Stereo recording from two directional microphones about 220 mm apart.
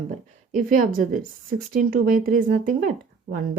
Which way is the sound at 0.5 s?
40° right (ahead or behind).